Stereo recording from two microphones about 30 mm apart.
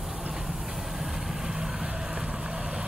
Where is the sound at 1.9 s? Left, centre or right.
Centre.